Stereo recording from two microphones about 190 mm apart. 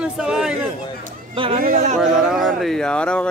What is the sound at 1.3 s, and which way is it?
Speech, 30° right (ahead or behind).